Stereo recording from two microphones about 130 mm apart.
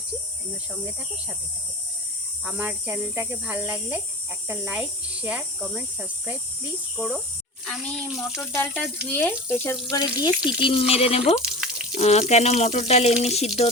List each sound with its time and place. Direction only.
2.4 s speech: 10° right (ahead or behind)
7.6 s speech: 5° left (ahead or behind)
8.1 s a sound: centre (ahead or behind)
8.5 s speech: 15° left (ahead or behind)
9.9 s speech: 30° left (ahead or behind)
10.6 s speech: 45° left (ahead or behind)
11.4 s drip: 5° right (ahead or behind)
11.9 s speech: 55° left (ahead or behind)